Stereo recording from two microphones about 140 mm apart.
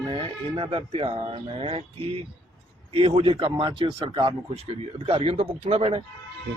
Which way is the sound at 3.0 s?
40° right (ahead or behind).